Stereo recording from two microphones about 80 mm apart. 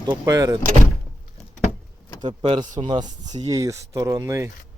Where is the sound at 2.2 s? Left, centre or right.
Right.